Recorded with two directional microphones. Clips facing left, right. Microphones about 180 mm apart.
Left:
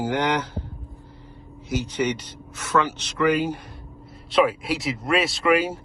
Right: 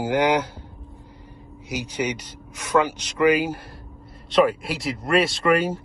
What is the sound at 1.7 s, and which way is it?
Speech, 10° right (ahead or behind).